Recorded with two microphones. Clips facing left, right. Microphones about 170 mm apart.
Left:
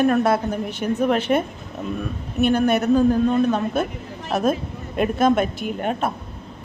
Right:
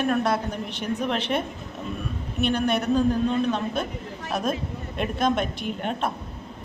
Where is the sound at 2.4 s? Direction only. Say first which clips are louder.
Left 5 dB; 5° left (ahead or behind).